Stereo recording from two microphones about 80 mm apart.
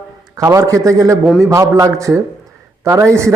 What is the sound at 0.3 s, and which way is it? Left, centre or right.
A man's voice, right.